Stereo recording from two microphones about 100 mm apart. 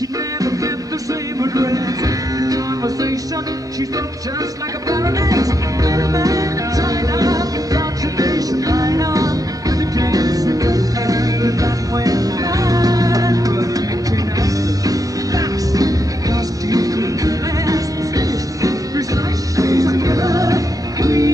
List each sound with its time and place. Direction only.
1.4 s speech: 35° right (ahead or behind)
2.4 s music: 35° right (ahead or behind)
4.8 s music: 35° right (ahead or behind)
14.9 s music: 35° right (ahead or behind)